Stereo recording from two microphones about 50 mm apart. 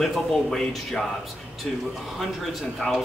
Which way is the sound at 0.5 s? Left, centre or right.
Centre.